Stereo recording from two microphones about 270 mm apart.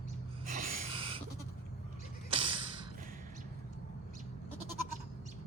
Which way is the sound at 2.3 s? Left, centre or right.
Centre.